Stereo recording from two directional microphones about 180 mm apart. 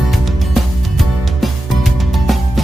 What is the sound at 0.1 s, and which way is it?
Music, centre (ahead or behind).